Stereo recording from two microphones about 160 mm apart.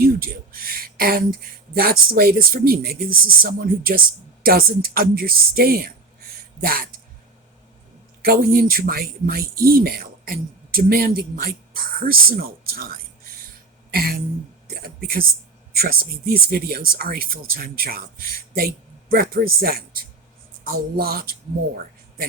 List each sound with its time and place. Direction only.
0.0 s speech: 65° right (ahead or behind)
8.2 s speech: 70° right (ahead or behind)
13.9 s a sound: 70° right (ahead or behind)
14.7 s speech: 65° right (ahead or behind)